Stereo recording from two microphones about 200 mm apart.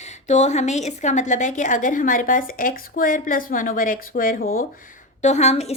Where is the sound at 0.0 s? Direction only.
35° left (ahead or behind).